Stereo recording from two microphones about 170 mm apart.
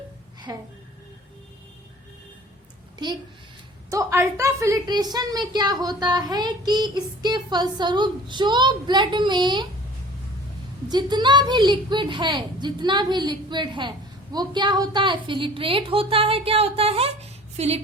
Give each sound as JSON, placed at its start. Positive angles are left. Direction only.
{"t": 0.5, "sound": "a woman's voice", "side_deg": -20}
{"t": 3.0, "sound": "a woman's voice", "side_deg": -25}
{"t": 10.8, "sound": "a woman's voice", "side_deg": -25}